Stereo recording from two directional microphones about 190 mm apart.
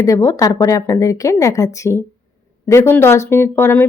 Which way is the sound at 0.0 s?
15° left (ahead or behind).